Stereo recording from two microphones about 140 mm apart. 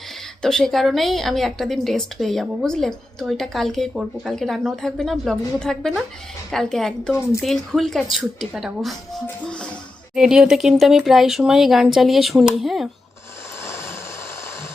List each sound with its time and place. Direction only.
0.4 s a woman's voice: centre (ahead or behind)
9.2 s music: 5° left (ahead or behind)
10.2 s a woman's voice: 5° right (ahead or behind)
13.7 s vehicle: 20° left (ahead or behind)